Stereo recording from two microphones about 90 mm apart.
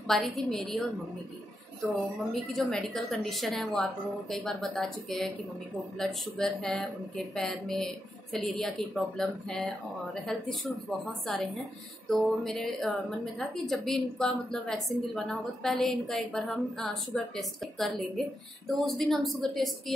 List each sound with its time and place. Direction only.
0.0 s speech: centre (ahead or behind)
2.5 s speech: 5° left (ahead or behind)